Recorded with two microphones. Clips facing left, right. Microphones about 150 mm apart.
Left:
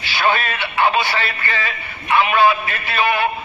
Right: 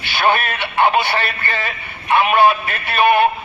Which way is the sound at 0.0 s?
55° right (ahead or behind).